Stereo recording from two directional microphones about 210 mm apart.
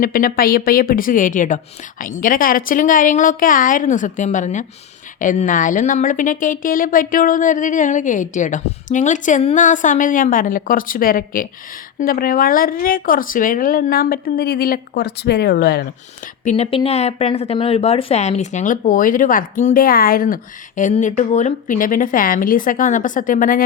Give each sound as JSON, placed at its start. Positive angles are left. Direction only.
{"t": 0.0, "sound": "speech", "side_deg": 40}
{"t": 16.4, "sound": "speech", "side_deg": 35}